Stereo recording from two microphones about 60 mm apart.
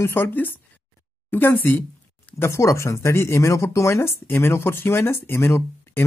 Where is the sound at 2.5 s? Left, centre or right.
Left.